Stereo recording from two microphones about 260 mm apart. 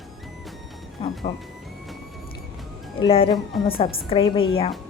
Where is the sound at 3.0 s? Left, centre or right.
Centre.